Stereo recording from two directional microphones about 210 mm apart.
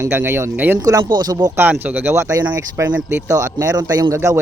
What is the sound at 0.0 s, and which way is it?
Speech, 10° right (ahead or behind).